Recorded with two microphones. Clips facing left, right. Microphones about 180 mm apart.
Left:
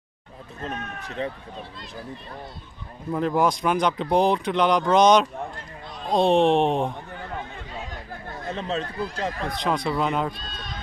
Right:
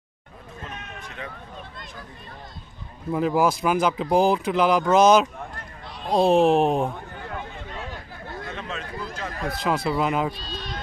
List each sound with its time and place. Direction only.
0.7 s run: 35° left (ahead or behind)
3.1 s speech: 5° right (ahead or behind)
8.5 s a man's voice: 35° left (ahead or behind)
9.6 s speech: 5° right (ahead or behind)
10.4 s sheep: 50° left (ahead or behind)